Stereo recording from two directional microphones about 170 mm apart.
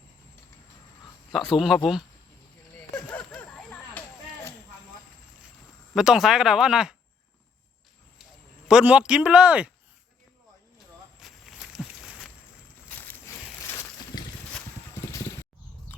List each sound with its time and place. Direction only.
1.3 s speech: centre (ahead or behind)
2.9 s a sound: 10° left (ahead or behind)
5.9 s speech: centre (ahead or behind)
8.6 s a man's voice: 5° right (ahead or behind)
11.2 s walk: centre (ahead or behind)
12.9 s a sound: 10° left (ahead or behind)
15.0 s mechanisms: 20° left (ahead or behind)